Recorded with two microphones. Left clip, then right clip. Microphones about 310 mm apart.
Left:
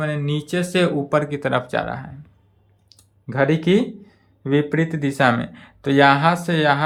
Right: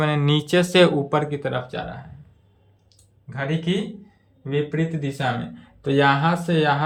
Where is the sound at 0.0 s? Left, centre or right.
Centre.